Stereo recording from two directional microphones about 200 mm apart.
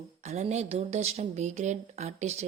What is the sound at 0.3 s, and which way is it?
A woman's voice, 35° right (ahead or behind).